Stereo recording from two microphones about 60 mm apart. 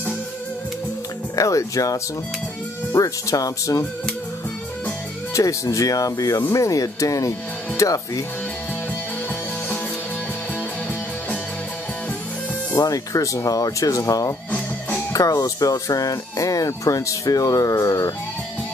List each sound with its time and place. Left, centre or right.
1.3 s speech: left
5.3 s speech: left
12.7 s speech: left
14.5 s music: left
15.1 s speech: left